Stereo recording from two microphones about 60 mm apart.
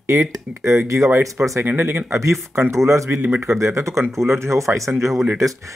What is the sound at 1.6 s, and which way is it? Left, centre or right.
Speech, right.